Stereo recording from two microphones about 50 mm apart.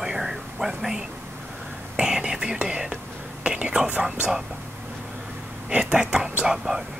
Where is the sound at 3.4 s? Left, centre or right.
Right.